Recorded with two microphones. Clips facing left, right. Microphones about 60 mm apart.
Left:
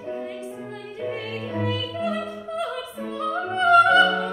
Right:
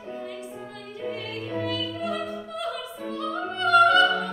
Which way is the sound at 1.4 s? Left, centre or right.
Centre.